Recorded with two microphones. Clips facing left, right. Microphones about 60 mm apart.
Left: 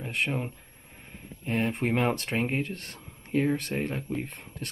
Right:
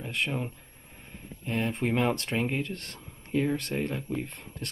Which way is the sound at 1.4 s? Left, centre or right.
Left.